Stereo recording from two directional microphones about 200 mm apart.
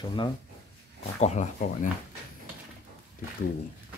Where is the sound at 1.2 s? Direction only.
35° left (ahead or behind).